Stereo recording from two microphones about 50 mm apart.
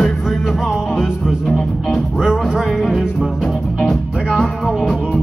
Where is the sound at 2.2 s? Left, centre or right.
Right.